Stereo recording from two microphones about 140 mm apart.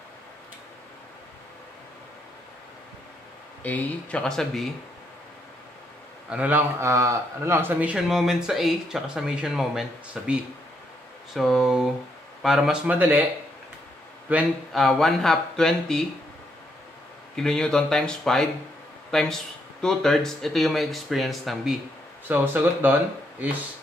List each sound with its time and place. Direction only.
3.6 s speech: 10° left (ahead or behind)
6.3 s speech: 10° right (ahead or behind)
6.8 s speech: 20° right (ahead or behind); by 10.3 s 5° right (ahead or behind)
11.3 s speech: centre (ahead or behind)
14.3 s speech: centre (ahead or behind)
17.4 s speech: 5° left (ahead or behind)
22.3 s speech: 15° right (ahead or behind)